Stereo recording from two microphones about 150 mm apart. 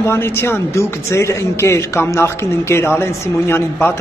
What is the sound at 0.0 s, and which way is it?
Speech, 15° left (ahead or behind).